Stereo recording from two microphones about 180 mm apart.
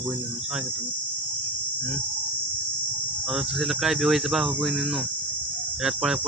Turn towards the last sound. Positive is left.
turn(degrees=0)  # may be behind; listen again after turning